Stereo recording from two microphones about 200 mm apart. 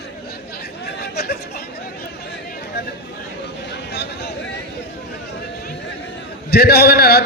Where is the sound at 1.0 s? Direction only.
55° left (ahead or behind).